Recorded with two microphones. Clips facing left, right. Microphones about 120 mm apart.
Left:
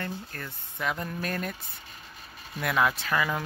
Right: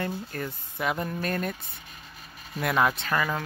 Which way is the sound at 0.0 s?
15° right (ahead or behind).